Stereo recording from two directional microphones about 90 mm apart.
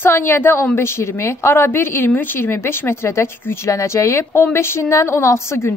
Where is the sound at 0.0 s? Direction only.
25° left (ahead or behind).